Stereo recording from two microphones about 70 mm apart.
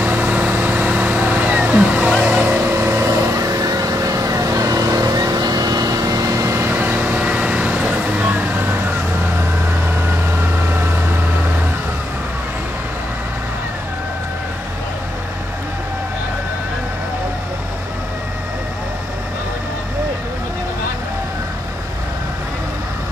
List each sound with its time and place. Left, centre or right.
0.0 s vehicle: right
2.8 s vehicle: right
3.1 s vehicle: right
6.5 s vehicle: right; by 8.3 s centre